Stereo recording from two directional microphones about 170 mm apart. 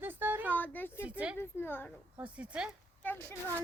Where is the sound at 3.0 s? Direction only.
10° left (ahead or behind).